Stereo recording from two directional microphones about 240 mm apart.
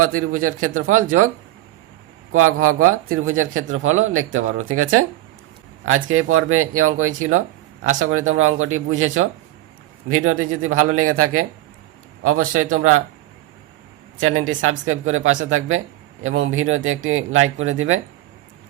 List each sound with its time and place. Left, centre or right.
0.0 s speech: right
2.3 s speech: right
14.2 s speech: right